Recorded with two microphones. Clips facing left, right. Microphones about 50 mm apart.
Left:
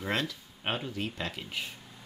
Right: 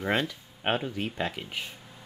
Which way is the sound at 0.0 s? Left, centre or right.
Centre.